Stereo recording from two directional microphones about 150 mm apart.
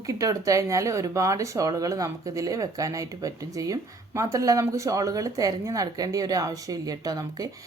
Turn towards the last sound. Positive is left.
turn(degrees=-25)  # may be behind; listen again after turning